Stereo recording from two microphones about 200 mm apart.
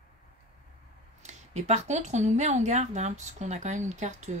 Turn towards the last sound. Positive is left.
turn(degrees=-35)  # may be behind; listen again after turning